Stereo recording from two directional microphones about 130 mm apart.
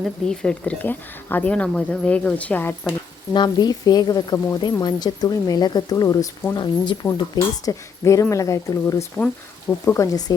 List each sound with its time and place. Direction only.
0.0 s speech: 5° left (ahead or behind)
3.3 s speech: 35° left (ahead or behind)
9.1 s speech: 10° left (ahead or behind); by 10.3 s 30° left (ahead or behind)